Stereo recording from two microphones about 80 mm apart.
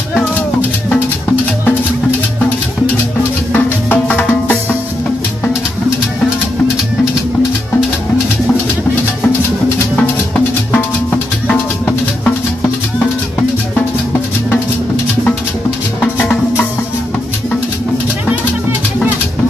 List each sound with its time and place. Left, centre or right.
0.1 s music: centre
3.5 s music: left
10.7 s music: left
16.2 s music: left